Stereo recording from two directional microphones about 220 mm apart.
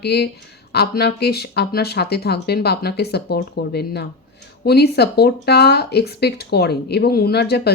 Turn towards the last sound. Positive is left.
turn(degrees=45)  # may be behind; listen again after turning